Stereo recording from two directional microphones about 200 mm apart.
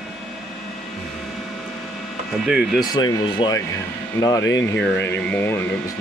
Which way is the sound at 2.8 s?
20° left (ahead or behind).